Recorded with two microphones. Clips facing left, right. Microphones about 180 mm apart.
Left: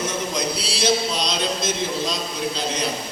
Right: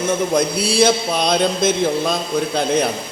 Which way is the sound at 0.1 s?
55° right (ahead or behind).